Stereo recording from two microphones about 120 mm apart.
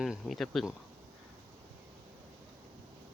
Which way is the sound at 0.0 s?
Centre (ahead or behind).